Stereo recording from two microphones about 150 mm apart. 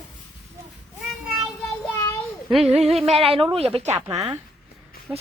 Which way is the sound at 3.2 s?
40° right (ahead or behind).